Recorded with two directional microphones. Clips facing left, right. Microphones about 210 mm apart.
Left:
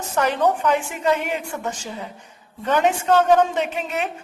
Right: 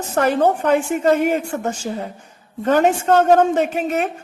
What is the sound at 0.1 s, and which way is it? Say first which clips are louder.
A woman's voice: right 3 dB; 40° right (ahead or behind).